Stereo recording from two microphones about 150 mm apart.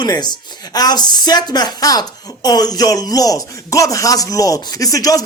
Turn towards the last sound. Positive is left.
turn(degrees=25)  # may be behind; listen again after turning